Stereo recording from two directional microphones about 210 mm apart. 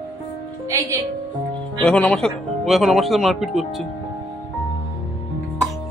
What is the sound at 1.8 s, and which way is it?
Speech, 5° left (ahead or behind).